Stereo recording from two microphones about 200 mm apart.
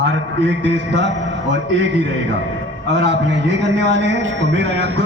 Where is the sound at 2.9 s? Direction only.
65° right (ahead or behind).